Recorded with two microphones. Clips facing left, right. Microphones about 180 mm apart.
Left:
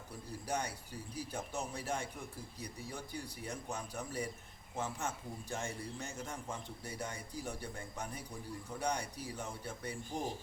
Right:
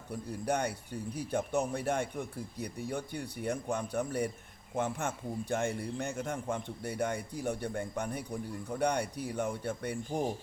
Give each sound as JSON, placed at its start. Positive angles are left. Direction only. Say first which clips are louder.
{"t": 0.1, "sound": "a man's voice", "louder": "right 7 dB", "side_deg": -60}